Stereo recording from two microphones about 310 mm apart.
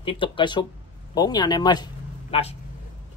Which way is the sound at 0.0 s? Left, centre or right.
Centre.